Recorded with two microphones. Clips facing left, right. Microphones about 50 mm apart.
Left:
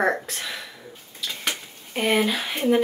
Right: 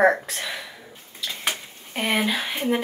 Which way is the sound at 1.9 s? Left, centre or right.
Centre.